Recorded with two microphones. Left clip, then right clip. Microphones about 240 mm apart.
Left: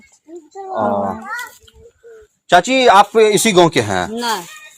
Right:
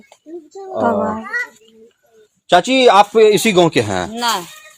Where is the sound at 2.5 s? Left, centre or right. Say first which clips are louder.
Even; centre.